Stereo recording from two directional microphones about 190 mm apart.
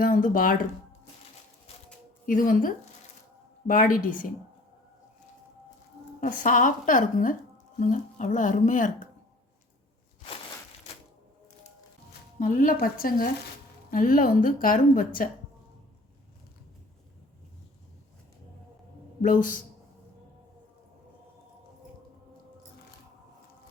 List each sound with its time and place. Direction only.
0.0 s speech: 45° left (ahead or behind)
2.2 s a woman's voice: 45° left (ahead or behind)
6.1 s a woman's voice: 45° left (ahead or behind)
12.4 s a woman's voice: 45° left (ahead or behind)
19.2 s a woman's voice: 45° left (ahead or behind)